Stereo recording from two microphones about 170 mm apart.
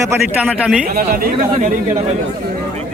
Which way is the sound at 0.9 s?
60° right (ahead or behind).